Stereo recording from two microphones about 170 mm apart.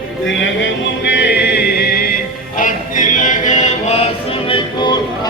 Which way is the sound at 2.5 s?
50° left (ahead or behind).